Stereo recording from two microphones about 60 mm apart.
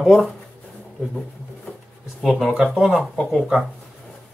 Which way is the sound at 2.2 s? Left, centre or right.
Centre.